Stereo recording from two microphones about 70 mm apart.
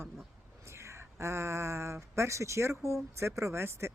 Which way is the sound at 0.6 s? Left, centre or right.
Right.